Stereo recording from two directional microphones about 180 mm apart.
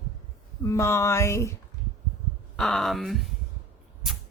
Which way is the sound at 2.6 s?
5° left (ahead or behind).